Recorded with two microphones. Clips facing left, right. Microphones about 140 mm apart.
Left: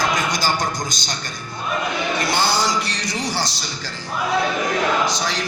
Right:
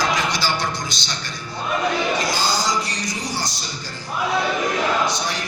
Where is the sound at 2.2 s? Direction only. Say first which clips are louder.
Left 2 dB; 65° left (ahead or behind).